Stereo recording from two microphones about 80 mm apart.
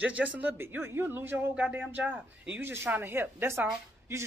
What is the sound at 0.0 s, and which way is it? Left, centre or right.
Speech, centre.